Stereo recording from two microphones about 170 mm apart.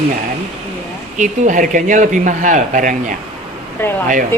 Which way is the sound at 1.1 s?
45° right (ahead or behind).